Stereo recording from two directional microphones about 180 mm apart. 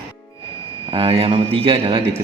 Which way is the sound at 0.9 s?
30° right (ahead or behind).